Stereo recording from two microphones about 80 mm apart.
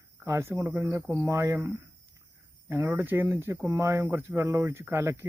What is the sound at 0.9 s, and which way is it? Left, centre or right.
Speech, right.